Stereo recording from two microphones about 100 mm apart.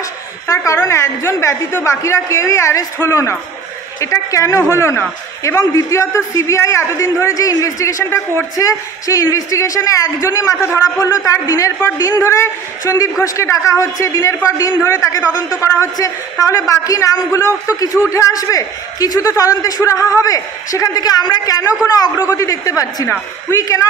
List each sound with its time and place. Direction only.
0.8 s a woman's voice: 30° left (ahead or behind)